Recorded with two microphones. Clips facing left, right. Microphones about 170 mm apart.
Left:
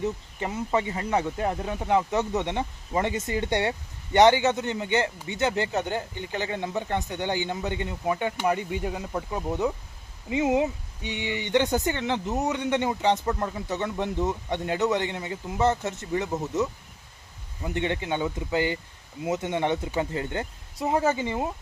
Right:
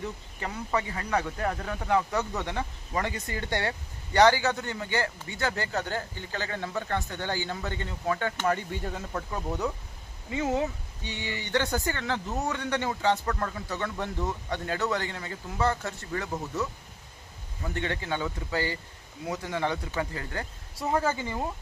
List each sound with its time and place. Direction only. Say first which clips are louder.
0.0 s speech: left 6 dB; 20° left (ahead or behind)